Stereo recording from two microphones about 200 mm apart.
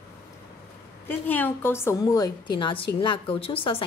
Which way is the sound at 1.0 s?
10° left (ahead or behind).